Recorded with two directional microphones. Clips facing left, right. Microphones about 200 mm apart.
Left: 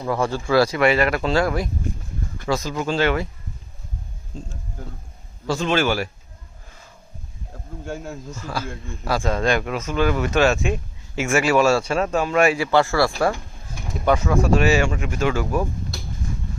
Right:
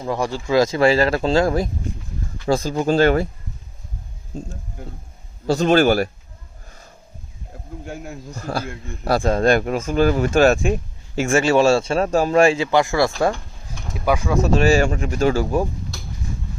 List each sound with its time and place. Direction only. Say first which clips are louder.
0.0 s speech: even; 15° right (ahead or behind); by 3.2 s 40° right (ahead or behind)
5.5 s speech: right 6 dB; 40° right (ahead or behind)
6.7 s wild animals: right 2 dB; 45° right (ahead or behind)
7.9 s speech: left 2 dB; 15° right (ahead or behind)
8.4 s a man's voice: right 5 dB; 55° right (ahead or behind)
9.2 s speech: right 5 dB; 35° right (ahead or behind)
10.3 s speech: right 4 dB; 50° right (ahead or behind)
10.6 s speech: right 3 dB; 35° right (ahead or behind)
12.7 s speech: right 1 dB; 15° right (ahead or behind)
13.9 s speech: even; 5° right (ahead or behind); by 15.6 s 30° right (ahead or behind)